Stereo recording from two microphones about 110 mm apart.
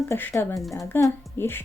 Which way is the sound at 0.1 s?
25° left (ahead or behind).